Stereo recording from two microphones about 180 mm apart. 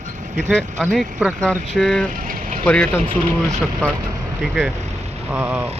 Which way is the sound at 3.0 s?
30° right (ahead or behind).